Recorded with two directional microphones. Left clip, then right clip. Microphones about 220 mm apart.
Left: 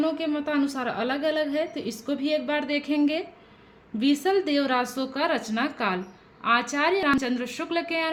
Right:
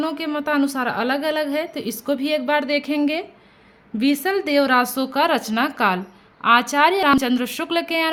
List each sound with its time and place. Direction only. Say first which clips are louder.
0.0 s a woman's voice: right 3 dB; 35° right (ahead or behind)